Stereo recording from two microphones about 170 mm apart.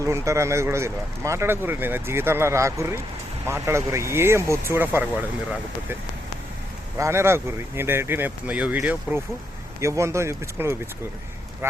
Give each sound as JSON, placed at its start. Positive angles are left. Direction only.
{"t": 0.0, "sound": "speech", "side_deg": -15}
{"t": 7.0, "sound": "speech", "side_deg": -15}